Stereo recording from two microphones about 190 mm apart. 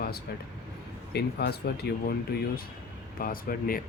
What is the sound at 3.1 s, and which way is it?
Speech, 50° left (ahead or behind).